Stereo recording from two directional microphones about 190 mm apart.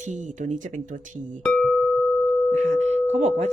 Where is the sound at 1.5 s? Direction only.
5° left (ahead or behind).